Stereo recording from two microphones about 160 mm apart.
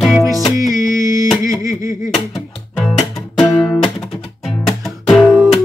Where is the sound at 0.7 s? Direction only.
20° right (ahead or behind).